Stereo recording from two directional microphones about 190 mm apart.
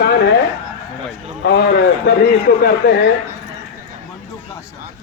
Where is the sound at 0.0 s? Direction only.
55° left (ahead or behind).